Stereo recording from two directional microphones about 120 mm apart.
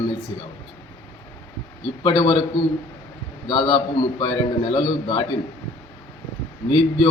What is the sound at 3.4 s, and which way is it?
A man's voice, 40° left (ahead or behind).